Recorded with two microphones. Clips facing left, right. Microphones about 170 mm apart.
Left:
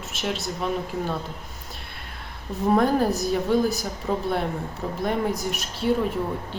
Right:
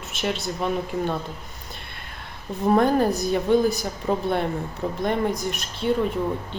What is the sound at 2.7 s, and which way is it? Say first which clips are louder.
A woman's voice: right 1 dB; centre (ahead or behind).